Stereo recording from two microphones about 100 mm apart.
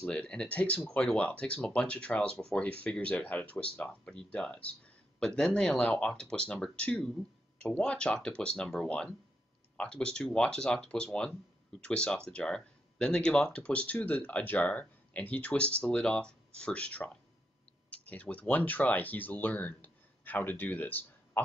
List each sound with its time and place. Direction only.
0.0 s speech: 10° left (ahead or behind)